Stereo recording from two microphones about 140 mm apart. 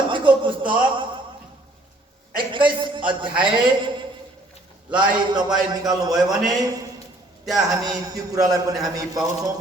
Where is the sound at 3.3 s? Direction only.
35° right (ahead or behind).